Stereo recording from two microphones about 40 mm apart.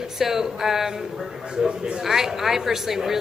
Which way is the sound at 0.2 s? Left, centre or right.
Centre.